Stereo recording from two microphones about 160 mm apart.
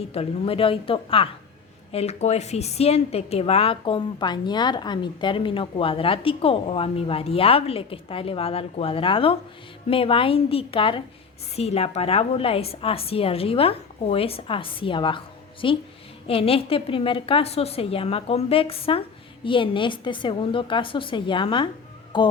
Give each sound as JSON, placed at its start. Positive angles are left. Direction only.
{"t": 0.1, "sound": "a woman's voice", "side_deg": 35}
{"t": 22.1, "sound": "music", "side_deg": 30}